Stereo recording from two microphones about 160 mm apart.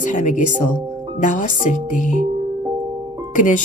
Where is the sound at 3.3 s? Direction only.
50° left (ahead or behind).